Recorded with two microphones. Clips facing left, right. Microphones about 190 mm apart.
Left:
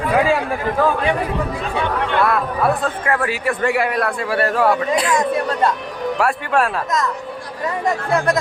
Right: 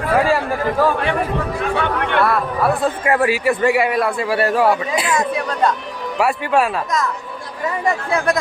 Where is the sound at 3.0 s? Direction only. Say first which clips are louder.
Right 5 dB; 15° right (ahead or behind).